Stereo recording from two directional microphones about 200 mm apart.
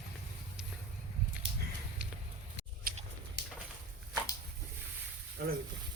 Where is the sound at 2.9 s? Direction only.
45° right (ahead or behind).